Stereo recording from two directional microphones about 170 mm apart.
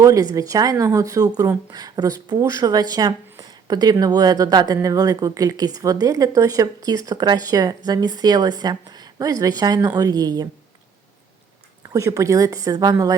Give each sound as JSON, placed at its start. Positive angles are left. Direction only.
{"t": 0.0, "sound": "speech", "side_deg": -20}
{"t": 11.9, "sound": "speech", "side_deg": -20}